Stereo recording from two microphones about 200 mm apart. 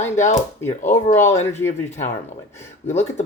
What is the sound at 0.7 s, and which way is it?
Speech, 35° left (ahead or behind).